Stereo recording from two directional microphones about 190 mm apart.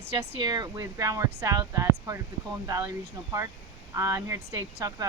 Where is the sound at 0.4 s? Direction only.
20° right (ahead or behind).